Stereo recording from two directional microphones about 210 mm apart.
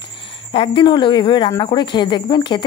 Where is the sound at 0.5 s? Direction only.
25° left (ahead or behind).